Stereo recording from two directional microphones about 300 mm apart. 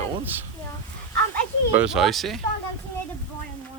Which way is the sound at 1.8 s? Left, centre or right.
Centre.